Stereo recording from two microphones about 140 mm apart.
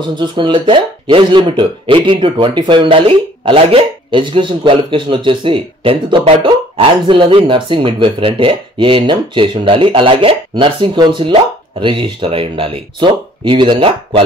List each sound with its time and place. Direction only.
0.1 s speech: 35° right (ahead or behind)